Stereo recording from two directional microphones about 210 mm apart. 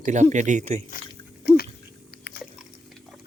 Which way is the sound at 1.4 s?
45° left (ahead or behind).